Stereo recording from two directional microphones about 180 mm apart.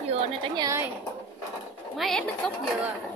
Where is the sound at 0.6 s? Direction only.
15° right (ahead or behind).